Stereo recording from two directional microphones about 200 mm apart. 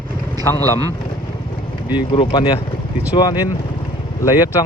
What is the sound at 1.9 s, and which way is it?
Speech, 25° left (ahead or behind).